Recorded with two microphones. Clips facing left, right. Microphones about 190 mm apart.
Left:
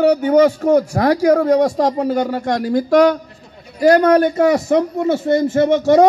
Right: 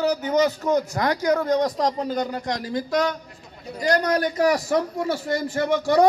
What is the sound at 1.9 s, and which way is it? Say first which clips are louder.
A man's voice: left 8 dB; 65° left (ahead or behind).